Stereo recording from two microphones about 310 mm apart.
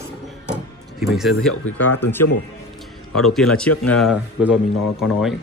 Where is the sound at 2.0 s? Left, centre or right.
Centre.